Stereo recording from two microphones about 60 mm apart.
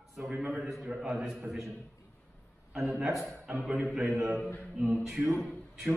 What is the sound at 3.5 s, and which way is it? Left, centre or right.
Speech, right.